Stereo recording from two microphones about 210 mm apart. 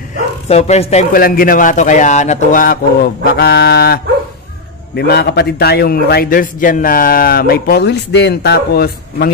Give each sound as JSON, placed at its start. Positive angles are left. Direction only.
{"t": 0.5, "sound": "a man's voice", "side_deg": 30}
{"t": 1.1, "sound": "a man's voice", "side_deg": 45}